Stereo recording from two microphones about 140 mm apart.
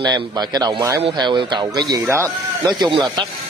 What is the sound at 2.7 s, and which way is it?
Speech, 30° right (ahead or behind).